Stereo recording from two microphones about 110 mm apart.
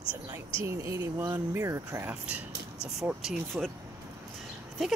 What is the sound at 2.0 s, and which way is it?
Speech, 10° right (ahead or behind).